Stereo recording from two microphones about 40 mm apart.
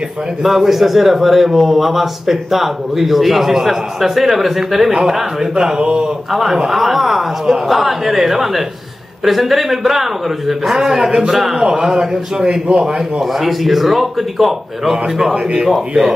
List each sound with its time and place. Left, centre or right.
0.4 s a man's voice: centre
5.8 s a man's voice: right
6.3 s a man's voice: centre; by 12.7 s right
13.4 s a man's voice: centre